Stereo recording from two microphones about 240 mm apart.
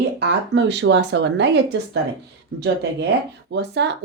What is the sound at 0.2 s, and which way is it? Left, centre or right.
Speech, right.